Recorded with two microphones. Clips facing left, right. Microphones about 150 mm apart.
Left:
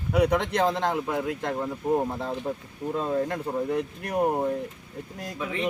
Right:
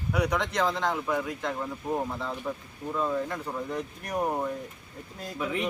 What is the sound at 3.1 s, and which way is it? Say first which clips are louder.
Speech: left 4 dB; 55° left (ahead or behind).